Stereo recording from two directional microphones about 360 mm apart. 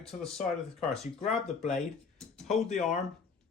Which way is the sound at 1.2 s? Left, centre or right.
Centre.